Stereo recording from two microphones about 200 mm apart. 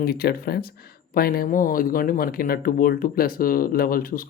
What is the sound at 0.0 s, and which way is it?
Speech, 50° left (ahead or behind).